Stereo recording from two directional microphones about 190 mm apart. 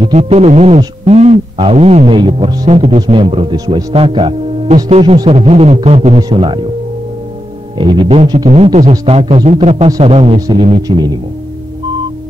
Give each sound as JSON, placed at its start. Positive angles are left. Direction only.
{"t": 0.0, "sound": "speech", "side_deg": -30}
{"t": 7.7, "sound": "speech", "side_deg": -25}